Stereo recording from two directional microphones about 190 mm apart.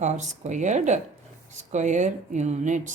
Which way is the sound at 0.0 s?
40° right (ahead or behind).